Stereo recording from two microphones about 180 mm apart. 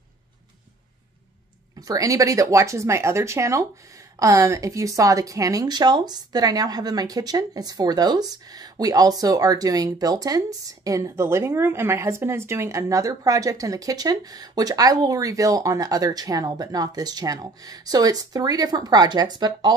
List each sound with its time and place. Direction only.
1.8 s speech: 20° right (ahead or behind)